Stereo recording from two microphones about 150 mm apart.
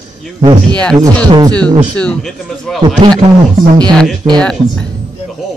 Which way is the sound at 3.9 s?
5° left (ahead or behind).